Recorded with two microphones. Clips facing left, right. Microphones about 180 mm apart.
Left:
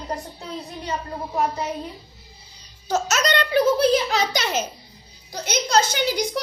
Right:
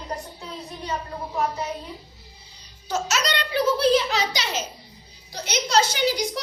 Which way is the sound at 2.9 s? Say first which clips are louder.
Left 4 dB; 45° left (ahead or behind).